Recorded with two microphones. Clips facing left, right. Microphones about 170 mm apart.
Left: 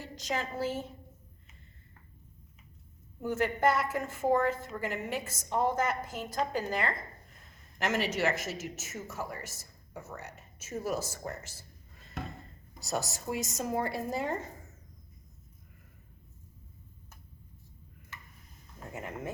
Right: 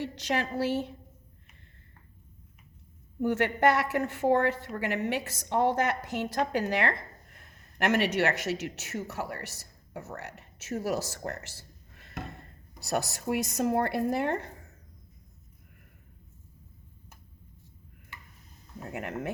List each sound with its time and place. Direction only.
0.0 s a woman's voice: 75° right (ahead or behind)
3.2 s a woman's voice: 70° right (ahead or behind)
18.9 s a woman's voice: 70° right (ahead or behind)